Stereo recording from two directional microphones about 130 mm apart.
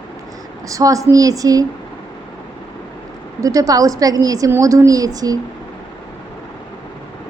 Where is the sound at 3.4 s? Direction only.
25° right (ahead or behind).